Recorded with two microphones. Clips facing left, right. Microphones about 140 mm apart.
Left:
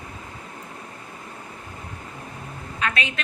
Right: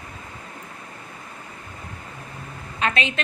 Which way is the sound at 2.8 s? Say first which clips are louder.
Right 3 dB; 25° right (ahead or behind).